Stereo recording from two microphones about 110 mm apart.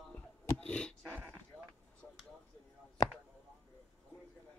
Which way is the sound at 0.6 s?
10° left (ahead or behind).